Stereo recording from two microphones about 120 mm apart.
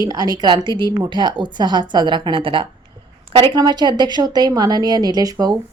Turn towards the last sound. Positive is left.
turn(degrees=-30)  # may be behind; listen again after turning